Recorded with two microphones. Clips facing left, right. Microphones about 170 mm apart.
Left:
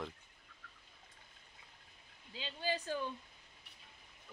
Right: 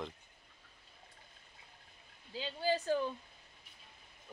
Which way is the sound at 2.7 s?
45° right (ahead or behind).